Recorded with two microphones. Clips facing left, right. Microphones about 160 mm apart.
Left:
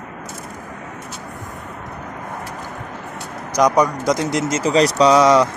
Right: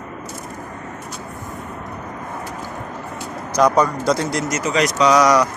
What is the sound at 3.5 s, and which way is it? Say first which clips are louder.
Speech: even; 15° left (ahead or behind).